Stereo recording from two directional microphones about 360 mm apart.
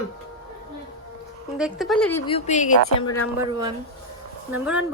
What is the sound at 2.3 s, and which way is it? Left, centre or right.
Speech, centre.